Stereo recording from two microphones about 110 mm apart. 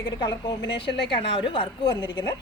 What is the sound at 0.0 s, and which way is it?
A woman's voice, 40° left (ahead or behind).